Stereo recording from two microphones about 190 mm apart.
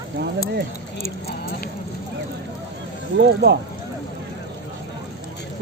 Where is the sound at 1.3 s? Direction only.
50° left (ahead or behind).